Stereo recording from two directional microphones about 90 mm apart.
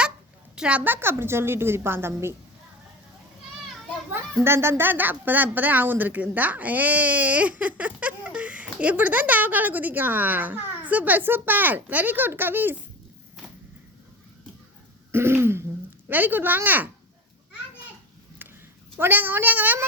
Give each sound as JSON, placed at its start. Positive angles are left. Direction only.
{"t": 0.5, "sound": "a woman's voice", "side_deg": -10}
{"t": 0.9, "sound": "a woman's voice", "side_deg": -25}
{"t": 4.4, "sound": "a woman's voice", "side_deg": -25}
{"t": 15.1, "sound": "a woman's voice", "side_deg": -25}
{"t": 18.9, "sound": "a woman's voice", "side_deg": -20}